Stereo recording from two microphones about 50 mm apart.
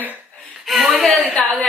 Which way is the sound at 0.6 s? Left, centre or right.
Centre.